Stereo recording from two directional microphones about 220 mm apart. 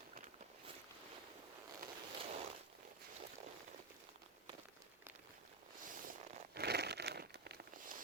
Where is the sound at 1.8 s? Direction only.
40° right (ahead or behind).